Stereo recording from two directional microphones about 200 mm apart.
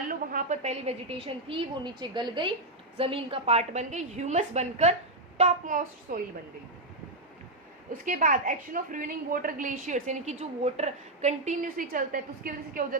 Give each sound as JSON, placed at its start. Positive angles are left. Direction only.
{"t": 0.1, "sound": "a woman's voice", "side_deg": -45}
{"t": 8.0, "sound": "a woman's voice", "side_deg": -40}